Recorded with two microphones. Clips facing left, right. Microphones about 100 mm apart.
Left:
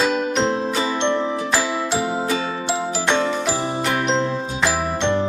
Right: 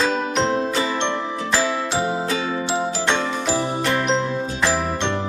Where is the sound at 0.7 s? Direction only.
20° left (ahead or behind).